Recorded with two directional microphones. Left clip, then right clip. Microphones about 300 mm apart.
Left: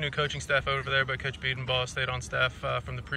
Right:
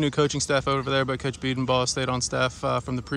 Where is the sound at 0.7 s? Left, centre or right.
Centre.